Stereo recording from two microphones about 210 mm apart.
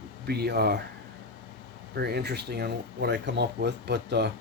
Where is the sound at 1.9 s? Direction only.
50° right (ahead or behind).